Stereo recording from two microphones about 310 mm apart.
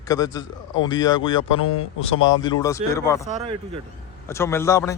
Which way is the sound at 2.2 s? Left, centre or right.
Centre.